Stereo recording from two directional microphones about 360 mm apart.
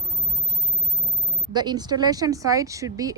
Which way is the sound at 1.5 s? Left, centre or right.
Centre.